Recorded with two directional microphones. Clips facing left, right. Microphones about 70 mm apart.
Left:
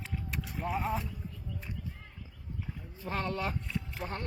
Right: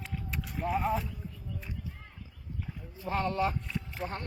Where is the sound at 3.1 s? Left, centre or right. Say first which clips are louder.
Right 3 dB; right.